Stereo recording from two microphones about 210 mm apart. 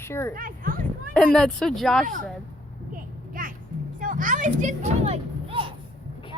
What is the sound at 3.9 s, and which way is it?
Speech, 40° right (ahead or behind).